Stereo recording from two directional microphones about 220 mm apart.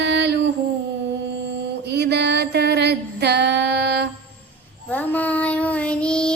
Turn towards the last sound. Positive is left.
turn(degrees=5)  # may be behind; listen again after turning